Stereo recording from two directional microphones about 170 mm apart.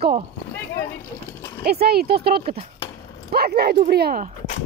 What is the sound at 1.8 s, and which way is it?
Speech, 65° right (ahead or behind).